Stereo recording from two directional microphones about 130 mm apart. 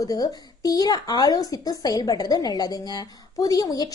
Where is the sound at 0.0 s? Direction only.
30° left (ahead or behind).